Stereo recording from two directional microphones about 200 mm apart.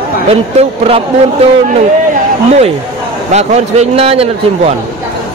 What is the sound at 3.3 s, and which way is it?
Speech, 35° right (ahead or behind).